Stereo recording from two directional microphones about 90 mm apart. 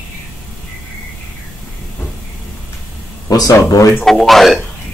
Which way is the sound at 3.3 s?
45° left (ahead or behind).